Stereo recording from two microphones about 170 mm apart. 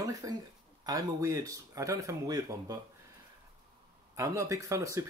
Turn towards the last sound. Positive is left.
turn(degrees=-15)  # may be behind; listen again after turning